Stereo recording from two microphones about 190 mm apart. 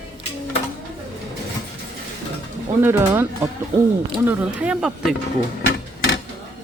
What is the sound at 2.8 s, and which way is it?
Speech, 10° right (ahead or behind).